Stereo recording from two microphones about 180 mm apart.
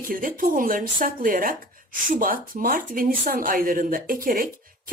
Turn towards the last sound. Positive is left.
turn(degrees=-50)  # may be behind; listen again after turning